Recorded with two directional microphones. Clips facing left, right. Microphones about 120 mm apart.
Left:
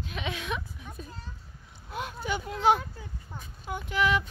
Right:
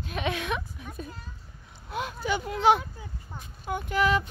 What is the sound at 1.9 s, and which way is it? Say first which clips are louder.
Speech: right 3 dB; 90° right.